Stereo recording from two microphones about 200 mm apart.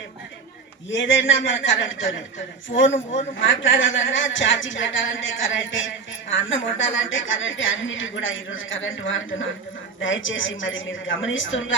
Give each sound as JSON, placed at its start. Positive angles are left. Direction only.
{"t": 0.9, "sound": "a woman's voice", "side_deg": 70}